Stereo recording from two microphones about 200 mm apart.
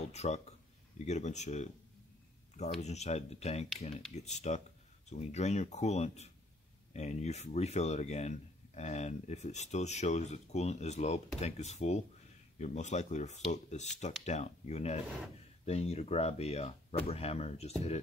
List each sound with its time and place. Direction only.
0.1 s speech: 30° left (ahead or behind)
2.8 s speech: 35° left (ahead or behind)